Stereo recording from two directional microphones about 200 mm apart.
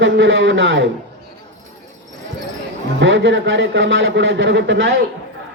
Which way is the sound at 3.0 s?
70° right (ahead or behind).